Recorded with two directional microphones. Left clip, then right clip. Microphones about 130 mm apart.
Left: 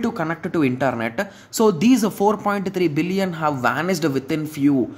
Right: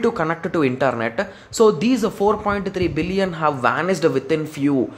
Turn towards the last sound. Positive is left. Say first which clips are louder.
# right 1 dB
turn(degrees=10)  # may be behind; listen again after turning